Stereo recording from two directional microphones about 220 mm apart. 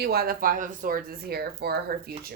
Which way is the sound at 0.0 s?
45° right (ahead or behind).